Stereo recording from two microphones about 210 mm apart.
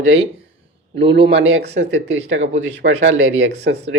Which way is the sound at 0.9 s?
60° right (ahead or behind).